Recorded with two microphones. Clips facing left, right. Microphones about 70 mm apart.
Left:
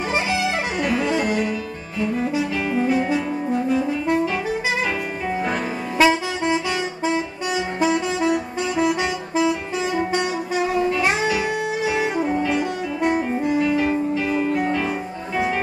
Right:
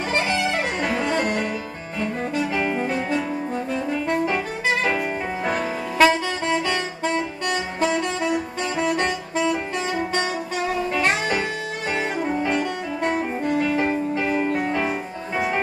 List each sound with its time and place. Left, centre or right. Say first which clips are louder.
0.1 s music: even; centre
2.5 s music: left 1 dB; centre
3.7 s saxophone: left 1 dB; centre
5.9 s saxophone: even; centre
13.7 s music: left 2 dB; right